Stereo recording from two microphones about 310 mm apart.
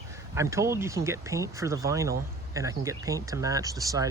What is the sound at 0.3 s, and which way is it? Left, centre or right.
Speech, centre.